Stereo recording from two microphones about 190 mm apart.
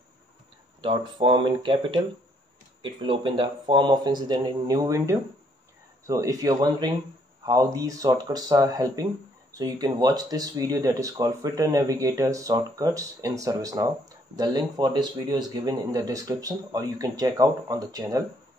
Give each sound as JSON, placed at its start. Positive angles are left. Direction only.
{"t": 0.7, "sound": "speech", "side_deg": -25}